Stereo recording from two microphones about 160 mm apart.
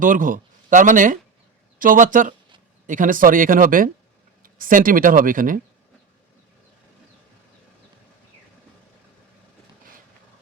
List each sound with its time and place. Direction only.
0.0 s speech: 55° right (ahead or behind)